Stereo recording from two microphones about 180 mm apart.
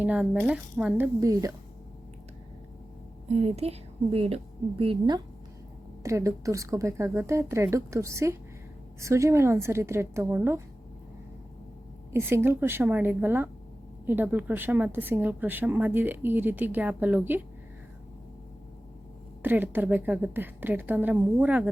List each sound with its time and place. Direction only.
0.0 s a woman's voice: 10° right (ahead or behind)
3.2 s a woman's voice: 35° right (ahead or behind)
6.0 s a woman's voice: 15° right (ahead or behind)
12.1 s a woman's voice: 15° right (ahead or behind)
19.4 s a woman's voice: 10° right (ahead or behind)